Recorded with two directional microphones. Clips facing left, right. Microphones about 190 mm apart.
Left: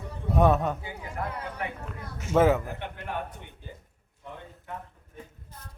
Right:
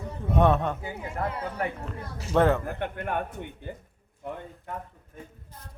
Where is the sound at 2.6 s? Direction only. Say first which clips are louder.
Right 5 dB; 55° right (ahead or behind).